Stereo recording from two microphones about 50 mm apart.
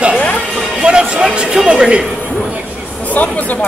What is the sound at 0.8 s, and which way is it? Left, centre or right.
Speech, centre.